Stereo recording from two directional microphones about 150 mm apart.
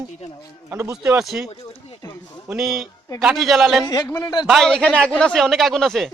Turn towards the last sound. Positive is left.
turn(degrees=0)  # may be behind; listen again after turning